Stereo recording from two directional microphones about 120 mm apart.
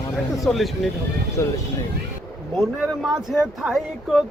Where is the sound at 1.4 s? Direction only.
20° left (ahead or behind).